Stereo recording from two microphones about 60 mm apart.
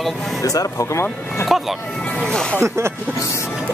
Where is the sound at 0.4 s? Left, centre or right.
Left.